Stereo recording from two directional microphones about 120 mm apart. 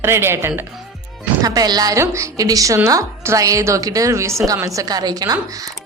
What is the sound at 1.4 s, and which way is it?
A woman's voice, 35° right (ahead or behind).